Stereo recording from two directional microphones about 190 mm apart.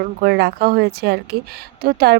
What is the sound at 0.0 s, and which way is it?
Speech, 55° right (ahead or behind).